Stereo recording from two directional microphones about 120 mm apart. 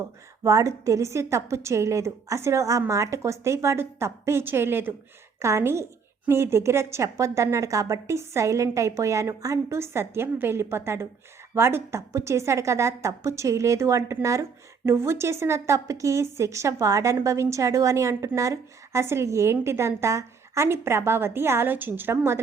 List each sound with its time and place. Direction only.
0.4 s a woman's voice: 25° right (ahead or behind)